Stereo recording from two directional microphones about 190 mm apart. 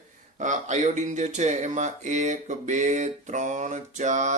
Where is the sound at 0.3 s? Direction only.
40° right (ahead or behind).